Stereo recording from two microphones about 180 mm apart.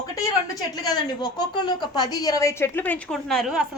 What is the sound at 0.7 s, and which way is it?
A woman's voice, 25° left (ahead or behind).